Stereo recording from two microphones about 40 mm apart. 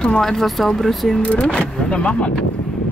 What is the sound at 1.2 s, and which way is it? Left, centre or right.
Speech, left.